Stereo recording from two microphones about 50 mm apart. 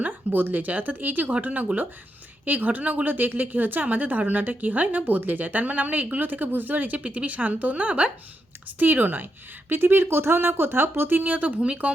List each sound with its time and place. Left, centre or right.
0.0 s a woman's voice: right
11.2 s a woman's voice: right